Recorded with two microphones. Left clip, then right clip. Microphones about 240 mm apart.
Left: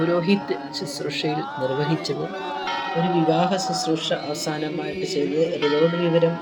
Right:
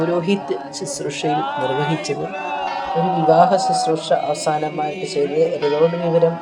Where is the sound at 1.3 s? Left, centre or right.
Right.